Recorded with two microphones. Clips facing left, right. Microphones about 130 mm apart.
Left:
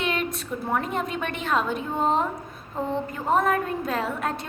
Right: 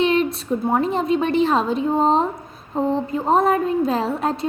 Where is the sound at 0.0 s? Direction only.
30° right (ahead or behind).